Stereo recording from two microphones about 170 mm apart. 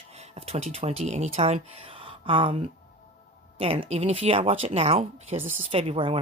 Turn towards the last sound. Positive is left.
turn(degrees=-35)  # may be behind; listen again after turning